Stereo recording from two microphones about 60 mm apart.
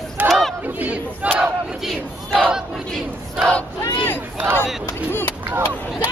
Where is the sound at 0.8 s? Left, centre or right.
Right.